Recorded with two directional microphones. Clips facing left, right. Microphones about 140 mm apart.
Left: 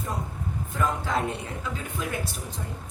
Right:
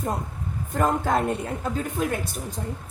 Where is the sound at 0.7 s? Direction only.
45° right (ahead or behind).